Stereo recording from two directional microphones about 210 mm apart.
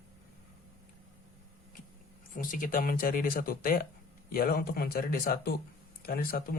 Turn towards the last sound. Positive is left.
turn(degrees=45)  # may be behind; listen again after turning